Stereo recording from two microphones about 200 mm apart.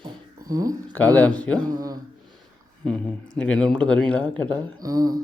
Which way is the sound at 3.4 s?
5° left (ahead or behind).